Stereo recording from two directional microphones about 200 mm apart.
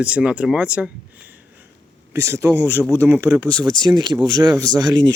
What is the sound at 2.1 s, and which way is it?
A man's voice, 15° right (ahead or behind).